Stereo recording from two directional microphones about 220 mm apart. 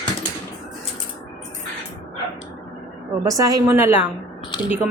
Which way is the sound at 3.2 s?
15° right (ahead or behind).